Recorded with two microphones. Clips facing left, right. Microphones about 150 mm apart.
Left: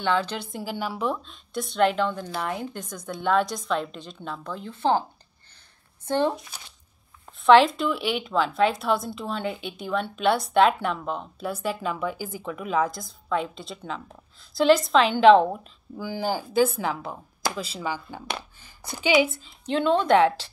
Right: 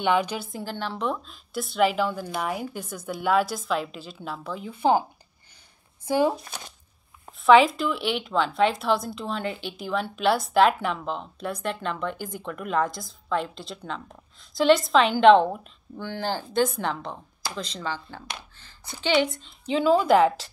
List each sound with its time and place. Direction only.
0.0 s a woman's voice: 15° right (ahead or behind)
0.4 s a woman's voice: centre (ahead or behind)
6.0 s a woman's voice: 10° right (ahead or behind)
6.4 s speech: 50° right (ahead or behind)
7.4 s a woman's voice: centre (ahead or behind)